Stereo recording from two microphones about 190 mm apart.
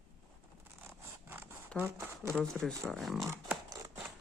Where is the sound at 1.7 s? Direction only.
10° right (ahead or behind).